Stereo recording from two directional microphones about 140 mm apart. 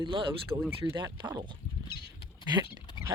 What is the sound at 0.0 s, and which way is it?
Speech, 35° right (ahead or behind).